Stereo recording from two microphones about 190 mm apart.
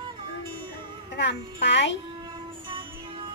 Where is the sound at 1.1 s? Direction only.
65° left (ahead or behind).